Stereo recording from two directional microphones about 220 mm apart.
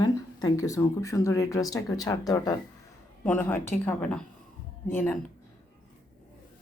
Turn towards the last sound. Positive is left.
turn(degrees=10)  # may be behind; listen again after turning